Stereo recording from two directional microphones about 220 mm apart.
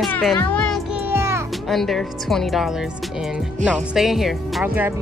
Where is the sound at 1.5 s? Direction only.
Centre (ahead or behind).